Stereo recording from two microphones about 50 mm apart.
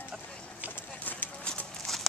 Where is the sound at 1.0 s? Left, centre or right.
Left.